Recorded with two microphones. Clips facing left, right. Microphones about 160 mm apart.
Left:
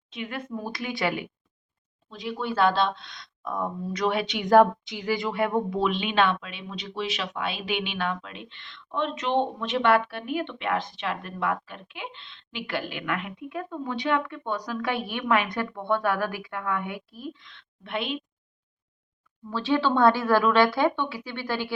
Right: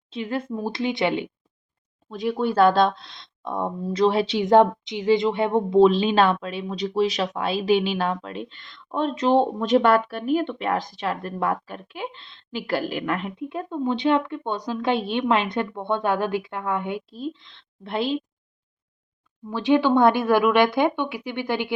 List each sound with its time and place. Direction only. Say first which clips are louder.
0.1 s speech: right 6 dB; 30° right (ahead or behind)
2.0 s speech: right 7 dB; 50° right (ahead or behind); by 18.2 s 35° right (ahead or behind)
19.5 s speech: right 5 dB; 15° right (ahead or behind)